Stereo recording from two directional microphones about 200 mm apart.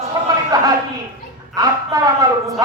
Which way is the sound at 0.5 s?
20° right (ahead or behind).